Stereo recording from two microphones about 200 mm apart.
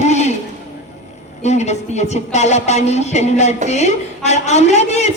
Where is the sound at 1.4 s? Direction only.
35° left (ahead or behind).